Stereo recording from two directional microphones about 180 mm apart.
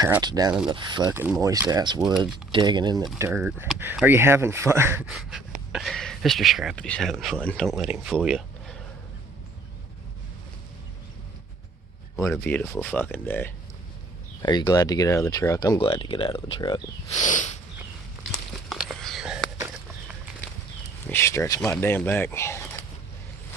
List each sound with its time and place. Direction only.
0.0 s speech: 20° right (ahead or behind)
1.1 s speech: 10° right (ahead or behind)
12.3 s speech: 5° left (ahead or behind)
14.4 s speech: 25° left (ahead or behind)
17.2 s a sound: 45° left (ahead or behind)
18.7 s a sound: centre (ahead or behind)
21.1 s speech: 15° left (ahead or behind)
21.6 s speech: 5° left (ahead or behind)